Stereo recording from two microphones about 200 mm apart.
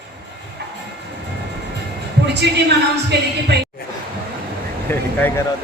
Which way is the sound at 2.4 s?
60° right (ahead or behind).